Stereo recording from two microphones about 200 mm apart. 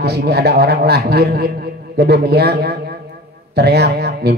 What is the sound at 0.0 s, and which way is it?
A man's voice, 55° right (ahead or behind).